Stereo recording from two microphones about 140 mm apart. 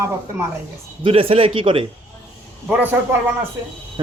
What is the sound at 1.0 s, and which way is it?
Speech, 40° right (ahead or behind).